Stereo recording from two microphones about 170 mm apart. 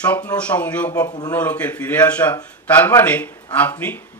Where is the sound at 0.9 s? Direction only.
20° left (ahead or behind).